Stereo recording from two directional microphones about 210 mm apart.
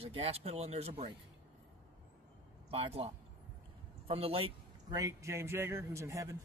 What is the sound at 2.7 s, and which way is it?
A man's voice, 25° right (ahead or behind).